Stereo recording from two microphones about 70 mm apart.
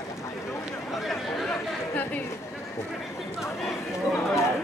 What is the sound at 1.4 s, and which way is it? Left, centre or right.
Chatter, left.